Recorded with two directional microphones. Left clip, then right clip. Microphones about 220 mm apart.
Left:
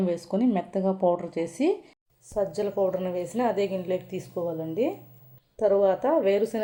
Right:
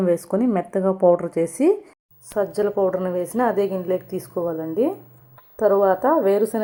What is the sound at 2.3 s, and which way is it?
A woman's voice, 55° right (ahead or behind).